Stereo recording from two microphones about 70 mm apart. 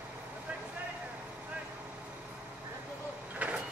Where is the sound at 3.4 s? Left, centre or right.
Centre.